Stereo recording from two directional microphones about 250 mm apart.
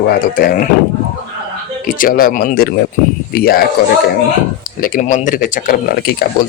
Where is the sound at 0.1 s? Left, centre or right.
Left.